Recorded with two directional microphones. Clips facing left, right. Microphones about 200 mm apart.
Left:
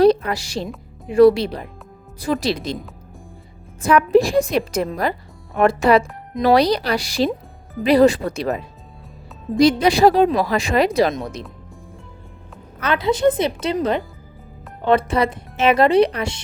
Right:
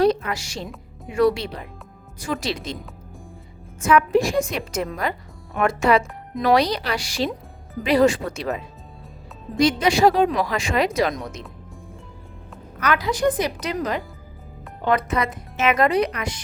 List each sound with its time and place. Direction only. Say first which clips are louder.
0.0 s music: left 5 dB; 35° left (ahead or behind)
1.1 s speech: left 7 dB; 35° left (ahead or behind)
3.8 s speech: left 3 dB; 35° left (ahead or behind)
12.8 s speech: left 4 dB; 25° left (ahead or behind)